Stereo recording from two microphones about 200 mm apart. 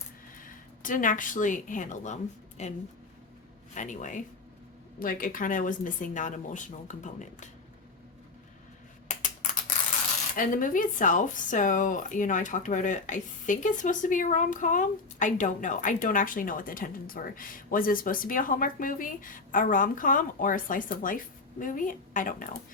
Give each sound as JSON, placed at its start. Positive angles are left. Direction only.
{"t": 0.3, "sound": "speech", "side_deg": 40}
{"t": 3.8, "sound": "speech", "side_deg": 40}
{"t": 10.3, "sound": "speech", "side_deg": 40}